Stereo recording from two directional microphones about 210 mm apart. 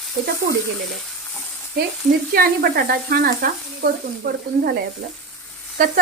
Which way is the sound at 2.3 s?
45° right (ahead or behind).